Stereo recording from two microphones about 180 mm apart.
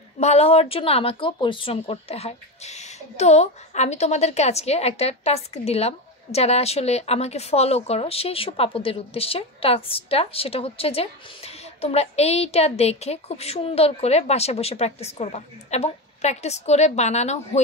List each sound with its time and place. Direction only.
0.2 s a woman's voice: 35° left (ahead or behind)